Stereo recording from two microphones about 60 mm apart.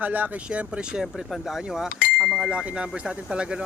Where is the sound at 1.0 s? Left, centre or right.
Centre.